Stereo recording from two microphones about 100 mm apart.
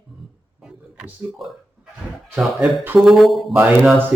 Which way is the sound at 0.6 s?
10° right (ahead or behind).